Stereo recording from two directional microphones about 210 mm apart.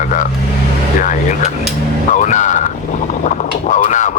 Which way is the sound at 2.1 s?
35° left (ahead or behind).